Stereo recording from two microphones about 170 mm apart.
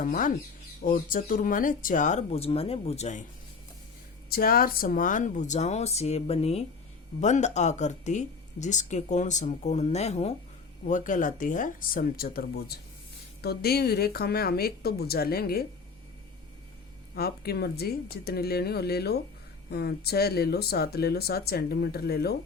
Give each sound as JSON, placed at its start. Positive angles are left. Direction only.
{"t": 0.0, "sound": "speech", "side_deg": 50}
{"t": 4.3, "sound": "speech", "side_deg": 60}
{"t": 10.8, "sound": "a woman's voice", "side_deg": 50}
{"t": 17.2, "sound": "speech", "side_deg": 65}